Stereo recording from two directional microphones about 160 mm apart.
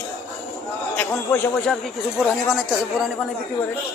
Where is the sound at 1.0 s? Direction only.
15° left (ahead or behind).